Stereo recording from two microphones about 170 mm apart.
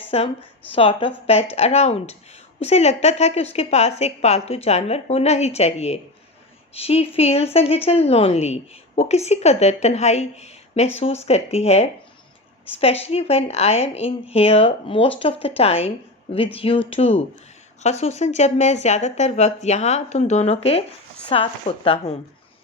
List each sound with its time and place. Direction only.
0.1 s a woman's voice: 35° left (ahead or behind)